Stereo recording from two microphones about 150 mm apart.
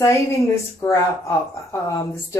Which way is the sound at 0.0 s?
20° left (ahead or behind).